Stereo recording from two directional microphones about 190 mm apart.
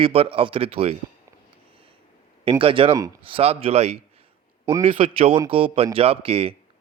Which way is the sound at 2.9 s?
20° right (ahead or behind).